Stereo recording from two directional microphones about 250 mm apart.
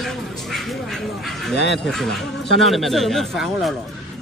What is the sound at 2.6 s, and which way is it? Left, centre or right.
Speech, centre.